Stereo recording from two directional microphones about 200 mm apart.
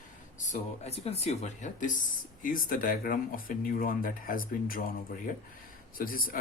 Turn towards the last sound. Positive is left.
turn(degrees=45)  # may be behind; listen again after turning